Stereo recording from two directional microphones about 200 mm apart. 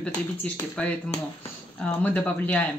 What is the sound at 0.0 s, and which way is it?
Speech, 5° left (ahead or behind).